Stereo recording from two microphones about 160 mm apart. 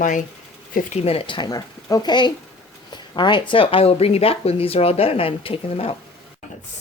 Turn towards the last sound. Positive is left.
turn(degrees=35)  # may be behind; listen again after turning